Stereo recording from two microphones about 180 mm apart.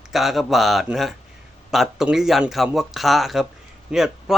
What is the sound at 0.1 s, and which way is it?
A man's voice, centre (ahead or behind).